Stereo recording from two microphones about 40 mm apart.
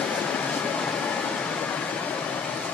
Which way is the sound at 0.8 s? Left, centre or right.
Left.